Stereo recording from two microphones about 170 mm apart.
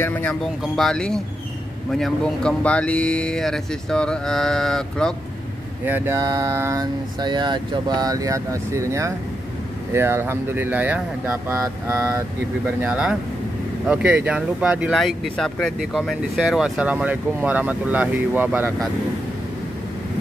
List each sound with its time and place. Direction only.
0.0 s speech: 10° left (ahead or behind)
5.9 s a sound: 15° right (ahead or behind)
9.9 s speech: 15° right (ahead or behind)